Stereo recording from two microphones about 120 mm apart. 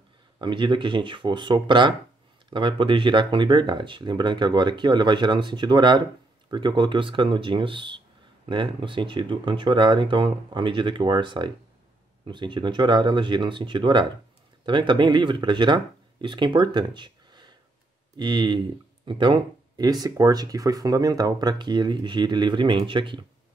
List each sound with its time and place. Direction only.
0.4 s speech: 40° right (ahead or behind)